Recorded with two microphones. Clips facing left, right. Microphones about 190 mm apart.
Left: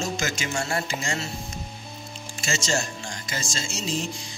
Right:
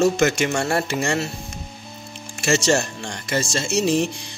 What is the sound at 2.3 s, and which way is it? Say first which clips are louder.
A man's voice: right 8 dB; 65° right (ahead or behind).